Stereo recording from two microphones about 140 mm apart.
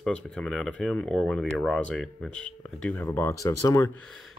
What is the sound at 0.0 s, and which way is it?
Speech, 5° left (ahead or behind).